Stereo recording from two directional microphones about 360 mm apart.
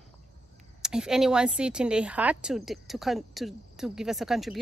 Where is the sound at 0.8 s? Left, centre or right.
Centre.